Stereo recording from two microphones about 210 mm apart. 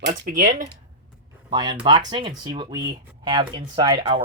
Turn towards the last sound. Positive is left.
turn(degrees=-20)  # may be behind; listen again after turning